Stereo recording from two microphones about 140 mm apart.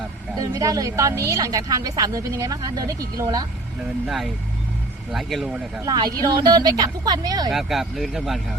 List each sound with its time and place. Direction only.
0.3 s a woman's voice: 25° right (ahead or behind)
4.0 s speech: centre (ahead or behind)
5.8 s a woman's voice: 30° right (ahead or behind)
7.5 s speech: centre (ahead or behind)